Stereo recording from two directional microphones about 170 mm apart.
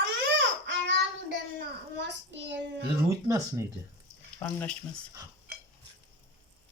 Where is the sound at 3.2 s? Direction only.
20° right (ahead or behind).